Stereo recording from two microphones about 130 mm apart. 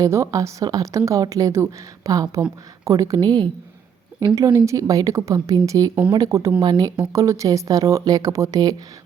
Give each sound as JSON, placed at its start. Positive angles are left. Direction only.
{"t": 0.0, "sound": "speech", "side_deg": -25}
{"t": 4.4, "sound": "speech", "side_deg": -25}